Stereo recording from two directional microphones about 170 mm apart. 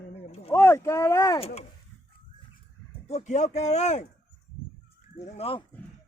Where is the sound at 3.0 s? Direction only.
40° left (ahead or behind).